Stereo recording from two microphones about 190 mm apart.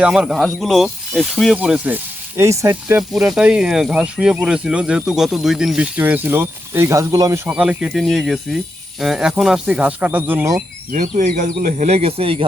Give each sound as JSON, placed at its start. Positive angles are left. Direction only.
{"t": 0.0, "sound": "speech", "side_deg": -5}
{"t": 10.9, "sound": "speech", "side_deg": -40}